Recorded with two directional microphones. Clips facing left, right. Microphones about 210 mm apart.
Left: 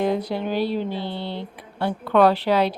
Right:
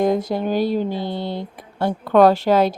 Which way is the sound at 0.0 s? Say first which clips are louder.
Right 4 dB; 45° right (ahead or behind).